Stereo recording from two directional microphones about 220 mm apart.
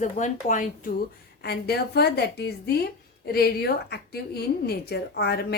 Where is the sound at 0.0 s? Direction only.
35° left (ahead or behind).